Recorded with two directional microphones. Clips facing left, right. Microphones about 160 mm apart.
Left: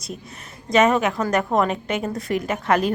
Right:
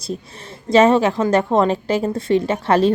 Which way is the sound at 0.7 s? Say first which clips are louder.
Right 5 dB; 30° right (ahead or behind).